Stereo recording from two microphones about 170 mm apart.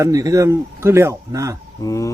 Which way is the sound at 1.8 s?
20° left (ahead or behind).